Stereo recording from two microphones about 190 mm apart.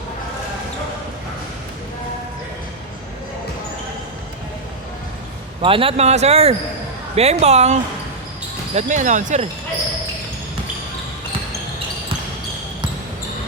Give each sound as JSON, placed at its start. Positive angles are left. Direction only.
{"t": 5.6, "sound": "speech", "side_deg": -30}